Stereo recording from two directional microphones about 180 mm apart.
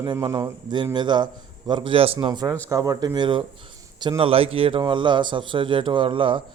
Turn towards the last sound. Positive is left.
turn(degrees=-30)  # may be behind; listen again after turning